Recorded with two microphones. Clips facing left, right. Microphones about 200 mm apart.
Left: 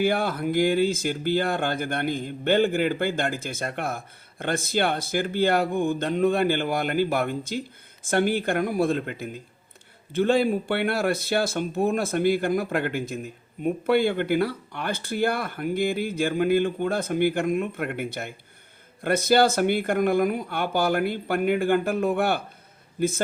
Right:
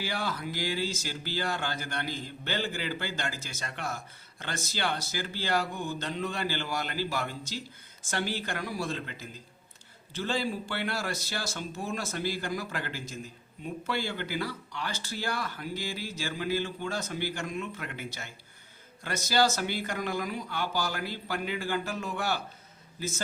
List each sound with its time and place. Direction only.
0.0 s a man's voice: 55° left (ahead or behind)